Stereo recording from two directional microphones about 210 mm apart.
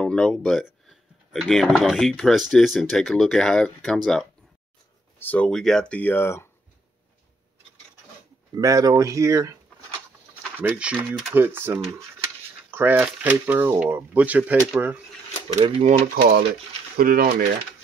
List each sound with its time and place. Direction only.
0.0 s speech: 5° left (ahead or behind)
8.5 s speech: 15° right (ahead or behind)
11.1 s speech: centre (ahead or behind)
15.5 s speech: 35° right (ahead or behind)